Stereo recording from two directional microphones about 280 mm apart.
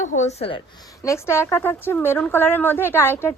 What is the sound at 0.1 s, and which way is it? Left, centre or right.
Speech, left.